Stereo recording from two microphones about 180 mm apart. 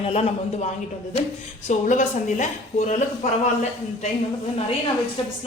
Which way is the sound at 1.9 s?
45° left (ahead or behind).